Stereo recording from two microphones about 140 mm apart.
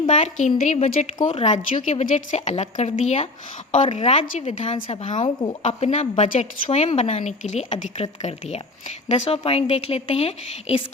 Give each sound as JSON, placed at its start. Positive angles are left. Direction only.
{"t": 0.1, "sound": "a woman's voice", "side_deg": 60}
{"t": 1.3, "sound": "a woman's voice", "side_deg": 45}
{"t": 5.2, "sound": "a woman's voice", "side_deg": 40}
{"t": 5.6, "sound": "a woman's voice", "side_deg": 50}